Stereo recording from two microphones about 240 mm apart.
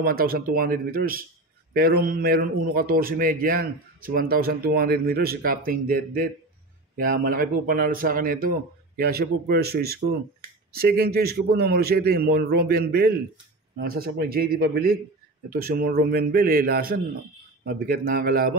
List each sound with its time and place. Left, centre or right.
0.0 s a man's voice: right